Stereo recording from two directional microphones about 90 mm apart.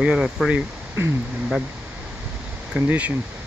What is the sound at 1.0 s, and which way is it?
Speech, 25° right (ahead or behind).